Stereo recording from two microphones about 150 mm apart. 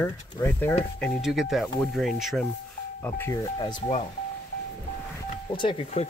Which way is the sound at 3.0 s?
15° left (ahead or behind).